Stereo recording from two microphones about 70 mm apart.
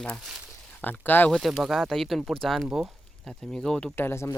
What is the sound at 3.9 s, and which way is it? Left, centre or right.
Speech, left.